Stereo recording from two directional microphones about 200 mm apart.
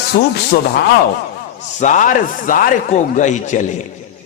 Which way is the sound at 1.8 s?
40° left (ahead or behind).